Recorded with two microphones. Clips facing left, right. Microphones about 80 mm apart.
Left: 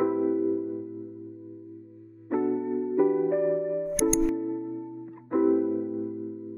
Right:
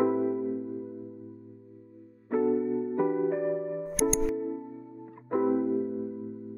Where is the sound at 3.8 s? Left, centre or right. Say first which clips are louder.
Left 2 dB; centre.